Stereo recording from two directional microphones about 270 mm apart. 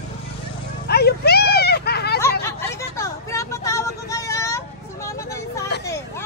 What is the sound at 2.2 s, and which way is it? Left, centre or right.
Hubbub, centre.